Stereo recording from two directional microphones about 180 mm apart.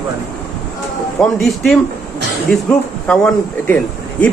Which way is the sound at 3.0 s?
5° left (ahead or behind).